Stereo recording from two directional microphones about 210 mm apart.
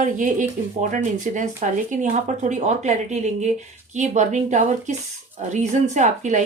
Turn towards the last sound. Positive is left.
turn(degrees=-35)  # may be behind; listen again after turning